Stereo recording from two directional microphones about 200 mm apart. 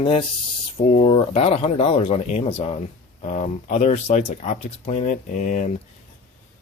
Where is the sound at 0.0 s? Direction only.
25° left (ahead or behind).